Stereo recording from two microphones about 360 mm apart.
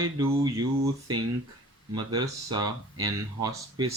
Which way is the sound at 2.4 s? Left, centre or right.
Right.